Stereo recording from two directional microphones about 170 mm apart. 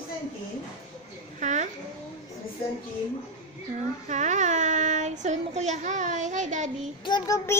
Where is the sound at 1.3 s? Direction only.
45° right (ahead or behind).